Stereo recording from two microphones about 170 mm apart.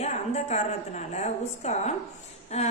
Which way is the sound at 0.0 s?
40° left (ahead or behind).